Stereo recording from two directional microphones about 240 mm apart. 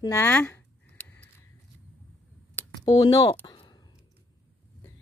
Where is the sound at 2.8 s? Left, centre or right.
Centre.